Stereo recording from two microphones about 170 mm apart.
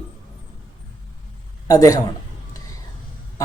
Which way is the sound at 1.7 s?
20° left (ahead or behind).